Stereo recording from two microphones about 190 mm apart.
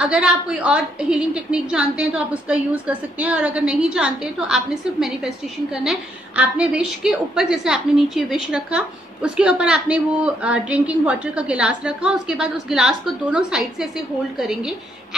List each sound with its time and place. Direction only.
0.0 s a woman's voice: 5° right (ahead or behind)
5.9 s a woman's voice: 5° right (ahead or behind)